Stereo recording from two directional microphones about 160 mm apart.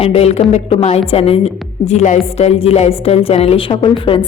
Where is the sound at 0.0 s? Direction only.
40° left (ahead or behind).